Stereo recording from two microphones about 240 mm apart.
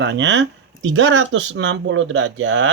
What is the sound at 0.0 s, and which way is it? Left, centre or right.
Speech, right.